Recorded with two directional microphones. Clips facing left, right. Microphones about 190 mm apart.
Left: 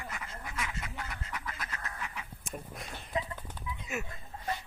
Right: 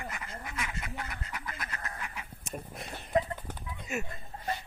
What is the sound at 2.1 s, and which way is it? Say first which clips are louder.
Duck: right 1 dB; 5° right (ahead or behind).